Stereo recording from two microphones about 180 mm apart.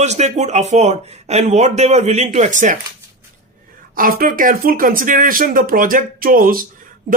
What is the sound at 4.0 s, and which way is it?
Speech, 50° right (ahead or behind).